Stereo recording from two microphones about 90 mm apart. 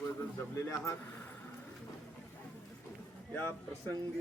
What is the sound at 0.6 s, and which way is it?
Speech, 30° left (ahead or behind).